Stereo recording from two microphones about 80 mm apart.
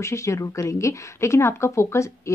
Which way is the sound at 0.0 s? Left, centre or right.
Left.